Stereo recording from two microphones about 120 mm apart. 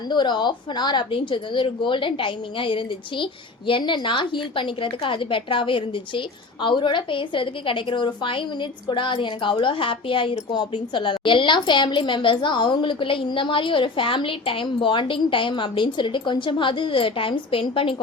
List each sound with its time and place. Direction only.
0.1 s a woman's voice: 40° left (ahead or behind)